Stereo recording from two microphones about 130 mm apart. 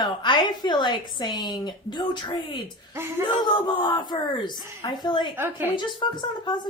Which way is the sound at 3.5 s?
35° left (ahead or behind).